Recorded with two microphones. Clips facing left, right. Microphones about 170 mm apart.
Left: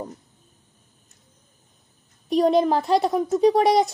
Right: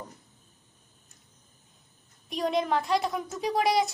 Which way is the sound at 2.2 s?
30° left (ahead or behind).